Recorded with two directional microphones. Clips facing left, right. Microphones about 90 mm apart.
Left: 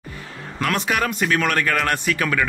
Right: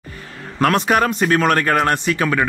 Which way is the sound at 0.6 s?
40° right (ahead or behind).